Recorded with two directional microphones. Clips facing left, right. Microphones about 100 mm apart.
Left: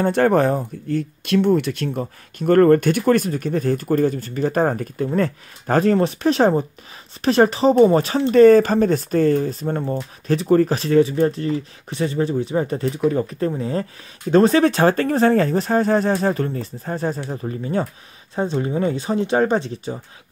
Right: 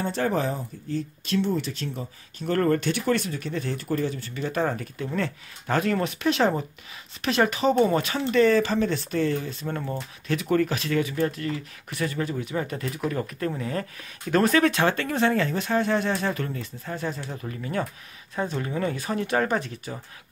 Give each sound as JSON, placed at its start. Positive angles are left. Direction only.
{"t": 0.0, "sound": "speech", "side_deg": 60}
{"t": 13.0, "sound": "speech", "side_deg": 20}
{"t": 13.6, "sound": "speech", "side_deg": 30}